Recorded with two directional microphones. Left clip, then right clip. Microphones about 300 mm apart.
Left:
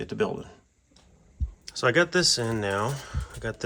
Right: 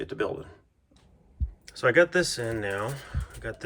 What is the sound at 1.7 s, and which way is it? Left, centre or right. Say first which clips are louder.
Speech: right 1 dB; centre.